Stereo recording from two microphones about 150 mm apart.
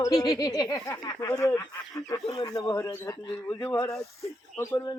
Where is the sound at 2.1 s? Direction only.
30° left (ahead or behind).